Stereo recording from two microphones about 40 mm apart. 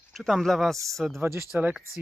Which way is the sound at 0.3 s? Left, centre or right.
Centre.